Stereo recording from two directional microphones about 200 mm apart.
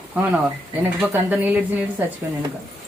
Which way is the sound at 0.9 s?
10° right (ahead or behind).